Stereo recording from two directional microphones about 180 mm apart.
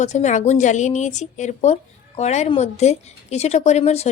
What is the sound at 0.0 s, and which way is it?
A woman's voice, 40° left (ahead or behind).